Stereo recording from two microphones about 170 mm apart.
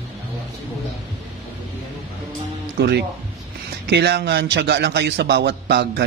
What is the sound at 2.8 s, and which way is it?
A man's voice, 75° right (ahead or behind).